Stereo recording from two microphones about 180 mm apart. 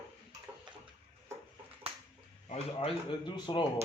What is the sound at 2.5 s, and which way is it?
Speech, 30° left (ahead or behind).